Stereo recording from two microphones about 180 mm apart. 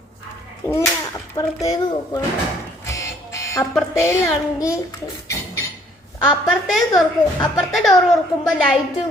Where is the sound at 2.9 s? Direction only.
20° left (ahead or behind).